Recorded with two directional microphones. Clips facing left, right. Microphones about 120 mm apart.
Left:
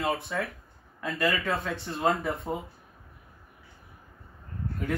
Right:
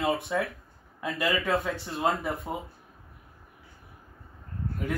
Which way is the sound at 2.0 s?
Centre (ahead or behind).